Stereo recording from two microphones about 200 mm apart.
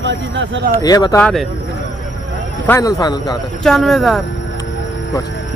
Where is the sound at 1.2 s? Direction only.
Centre (ahead or behind).